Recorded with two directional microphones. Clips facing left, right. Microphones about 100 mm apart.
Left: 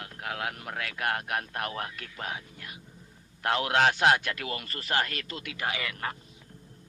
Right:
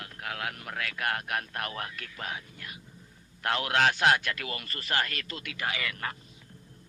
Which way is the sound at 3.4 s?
20° left (ahead or behind).